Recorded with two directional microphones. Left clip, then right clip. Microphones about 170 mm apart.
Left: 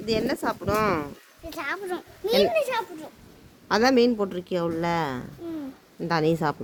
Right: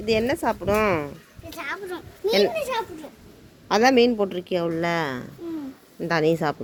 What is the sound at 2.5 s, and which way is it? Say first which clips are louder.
Speech: left 2 dB; 25° left (ahead or behind).